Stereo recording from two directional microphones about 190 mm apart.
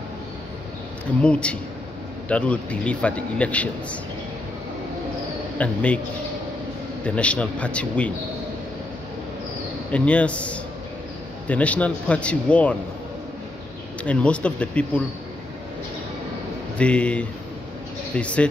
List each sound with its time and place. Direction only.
1.2 s a man's voice: 5° left (ahead or behind)
5.6 s speech: 5° left (ahead or behind)
7.1 s speech: 5° left (ahead or behind)
9.8 s speech: 5° left (ahead or behind)
14.0 s speech: 5° left (ahead or behind)
16.7 s speech: 5° left (ahead or behind)